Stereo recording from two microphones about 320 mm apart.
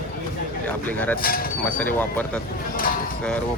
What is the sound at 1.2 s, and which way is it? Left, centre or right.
Speech, left.